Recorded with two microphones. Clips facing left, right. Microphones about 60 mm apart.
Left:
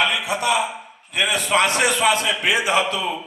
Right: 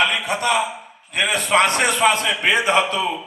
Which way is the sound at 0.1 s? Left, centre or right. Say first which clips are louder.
Right 1 dB; right.